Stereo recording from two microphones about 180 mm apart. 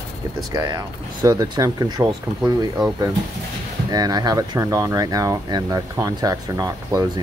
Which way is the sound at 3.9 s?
20° right (ahead or behind).